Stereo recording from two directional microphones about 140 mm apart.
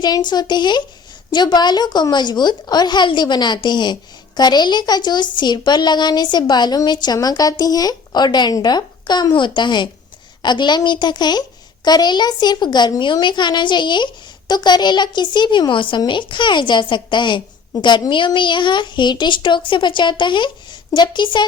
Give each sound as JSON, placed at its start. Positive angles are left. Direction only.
{"t": 0.0, "sound": "a woman's voice", "side_deg": 30}